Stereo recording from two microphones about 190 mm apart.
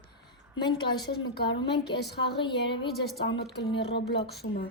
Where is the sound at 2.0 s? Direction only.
60° left (ahead or behind).